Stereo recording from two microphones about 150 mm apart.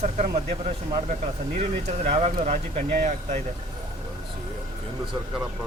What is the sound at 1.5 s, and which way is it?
Speech, 45° right (ahead or behind).